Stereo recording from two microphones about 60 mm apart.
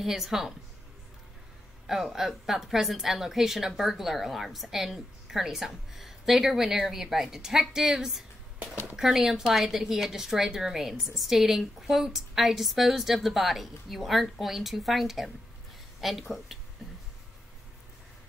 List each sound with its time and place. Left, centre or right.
0.0 s a woman's voice: centre
1.9 s a woman's voice: centre